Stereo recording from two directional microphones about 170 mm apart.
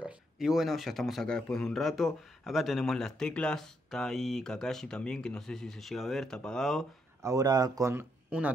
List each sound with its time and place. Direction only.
0.0 s speech: centre (ahead or behind)
7.2 s speech: 20° right (ahead or behind)